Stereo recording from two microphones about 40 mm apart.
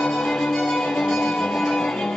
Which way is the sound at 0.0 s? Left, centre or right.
Centre.